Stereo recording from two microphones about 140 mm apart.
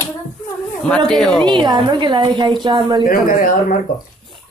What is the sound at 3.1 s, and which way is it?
Speech, 90° left.